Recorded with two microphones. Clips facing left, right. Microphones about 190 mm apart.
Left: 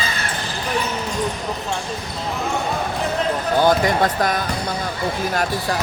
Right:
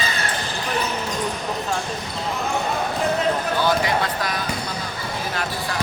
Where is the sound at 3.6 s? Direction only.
50° left (ahead or behind).